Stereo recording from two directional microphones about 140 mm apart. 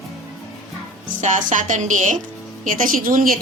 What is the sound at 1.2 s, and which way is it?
Speech, 60° right (ahead or behind).